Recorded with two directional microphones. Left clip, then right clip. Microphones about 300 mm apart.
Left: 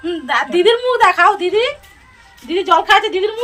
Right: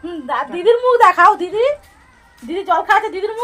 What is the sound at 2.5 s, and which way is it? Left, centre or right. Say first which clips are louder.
Speech: left 3 dB; right.